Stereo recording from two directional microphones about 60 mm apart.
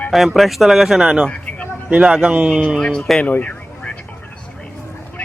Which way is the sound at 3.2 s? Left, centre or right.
Left.